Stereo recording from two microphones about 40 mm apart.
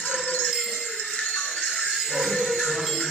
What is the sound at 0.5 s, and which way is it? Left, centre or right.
Music, centre.